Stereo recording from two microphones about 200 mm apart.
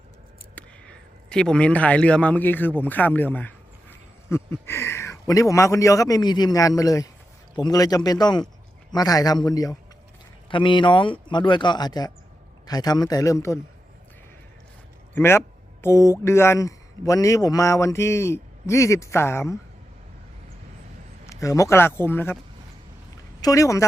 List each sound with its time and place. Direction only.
0.5 s a man's voice: 5° left (ahead or behind)
15.1 s speech: 10° left (ahead or behind)
21.2 s speech: 15° left (ahead or behind)
23.4 s speech: 15° left (ahead or behind)